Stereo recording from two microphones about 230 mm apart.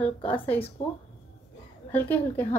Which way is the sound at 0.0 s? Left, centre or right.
Centre.